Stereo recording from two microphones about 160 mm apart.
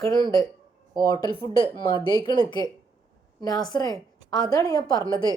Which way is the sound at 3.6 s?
25° left (ahead or behind).